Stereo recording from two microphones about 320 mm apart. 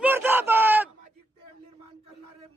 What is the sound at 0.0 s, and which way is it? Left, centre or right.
Crowd, centre.